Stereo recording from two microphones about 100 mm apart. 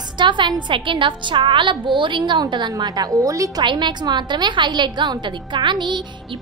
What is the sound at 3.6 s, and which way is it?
A woman's voice, 50° right (ahead or behind).